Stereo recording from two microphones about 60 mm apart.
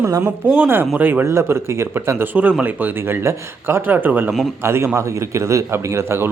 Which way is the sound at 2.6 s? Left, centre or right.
Right.